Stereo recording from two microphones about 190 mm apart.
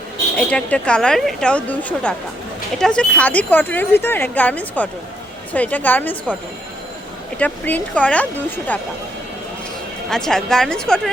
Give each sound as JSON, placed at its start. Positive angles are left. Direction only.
{"t": 0.3, "sound": "a woman's voice", "side_deg": 5}
{"t": 7.3, "sound": "speech", "side_deg": 10}
{"t": 10.1, "sound": "a woman's voice", "side_deg": 0}